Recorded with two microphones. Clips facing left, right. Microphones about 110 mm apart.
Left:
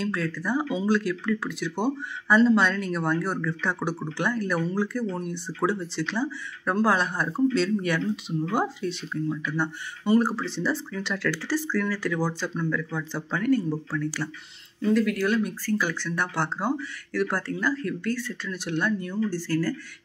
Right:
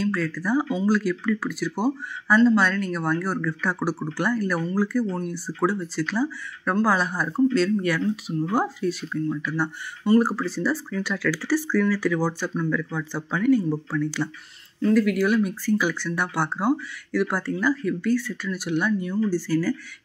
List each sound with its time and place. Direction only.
0.0 s speech: centre (ahead or behind)
14.8 s speech: centre (ahead or behind)